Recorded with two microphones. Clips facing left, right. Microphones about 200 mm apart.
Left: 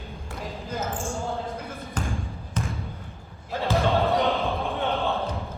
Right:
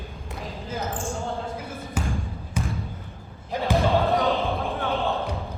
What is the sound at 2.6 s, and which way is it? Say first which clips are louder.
Basketball bounce: right 1 dB; 10° right (ahead or behind).